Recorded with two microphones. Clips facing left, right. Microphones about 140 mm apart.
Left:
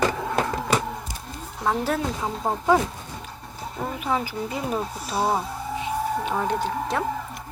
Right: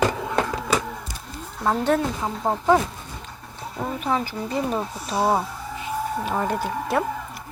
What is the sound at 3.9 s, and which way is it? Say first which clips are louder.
A child's voice: right 1 dB; 5° left (ahead or behind).